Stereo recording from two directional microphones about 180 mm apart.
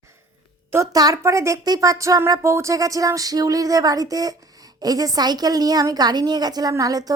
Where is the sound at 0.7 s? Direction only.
20° right (ahead or behind).